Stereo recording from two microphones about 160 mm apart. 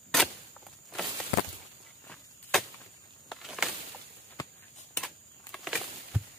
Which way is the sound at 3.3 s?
5° right (ahead or behind).